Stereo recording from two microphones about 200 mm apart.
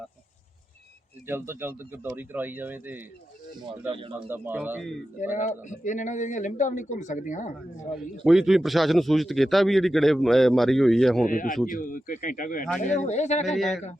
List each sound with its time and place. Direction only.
1.3 s speech: 10° right (ahead or behind)
4.3 s speech: 10° right (ahead or behind)
5.4 s a man's voice: 40° left (ahead or behind)
7.9 s speech: centre (ahead or behind)
11.3 s a man's voice: 40° left (ahead or behind)
13.6 s speech: centre (ahead or behind)